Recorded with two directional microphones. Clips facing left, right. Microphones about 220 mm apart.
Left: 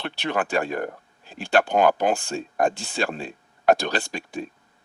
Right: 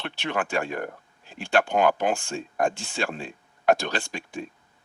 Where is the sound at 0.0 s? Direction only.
35° left (ahead or behind).